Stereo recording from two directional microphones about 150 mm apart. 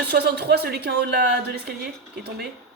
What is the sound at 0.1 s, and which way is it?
Speech, 90° right.